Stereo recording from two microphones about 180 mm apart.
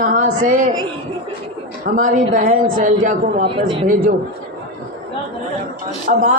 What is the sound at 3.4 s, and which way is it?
Speech, 30° right (ahead or behind).